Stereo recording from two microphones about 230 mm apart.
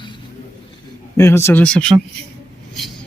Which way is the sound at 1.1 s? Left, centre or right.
Centre.